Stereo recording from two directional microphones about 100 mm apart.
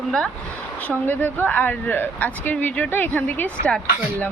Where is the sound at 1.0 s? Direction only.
20° left (ahead or behind).